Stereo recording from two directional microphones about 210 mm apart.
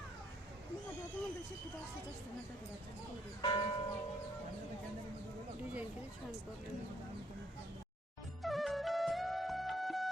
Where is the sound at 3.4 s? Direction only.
20° left (ahead or behind).